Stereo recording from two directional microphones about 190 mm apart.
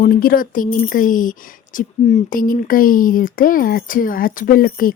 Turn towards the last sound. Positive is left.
turn(degrees=50)  # may be behind; listen again after turning